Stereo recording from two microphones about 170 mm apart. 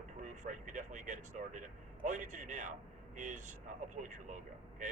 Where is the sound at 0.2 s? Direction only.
50° right (ahead or behind).